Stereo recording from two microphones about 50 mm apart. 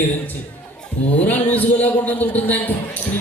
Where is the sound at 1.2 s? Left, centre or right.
Left.